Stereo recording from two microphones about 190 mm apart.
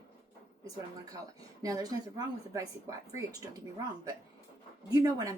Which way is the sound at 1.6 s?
20° right (ahead or behind).